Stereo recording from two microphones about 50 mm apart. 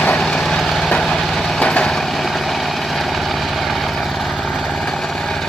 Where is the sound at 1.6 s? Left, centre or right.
Centre.